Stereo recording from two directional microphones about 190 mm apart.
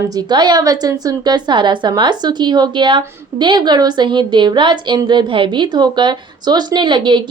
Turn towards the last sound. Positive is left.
turn(degrees=-25)  # may be behind; listen again after turning